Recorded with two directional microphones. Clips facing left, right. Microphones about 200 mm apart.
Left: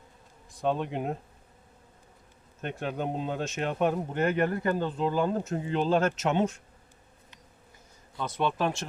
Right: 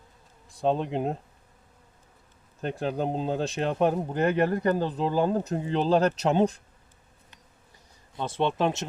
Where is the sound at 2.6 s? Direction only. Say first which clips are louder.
Right 4 dB; 35° right (ahead or behind).